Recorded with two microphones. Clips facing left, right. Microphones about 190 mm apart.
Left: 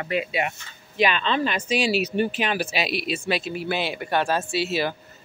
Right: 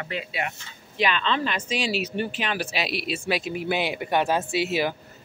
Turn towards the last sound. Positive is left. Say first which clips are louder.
# even
turn(degrees=-15)  # may be behind; listen again after turning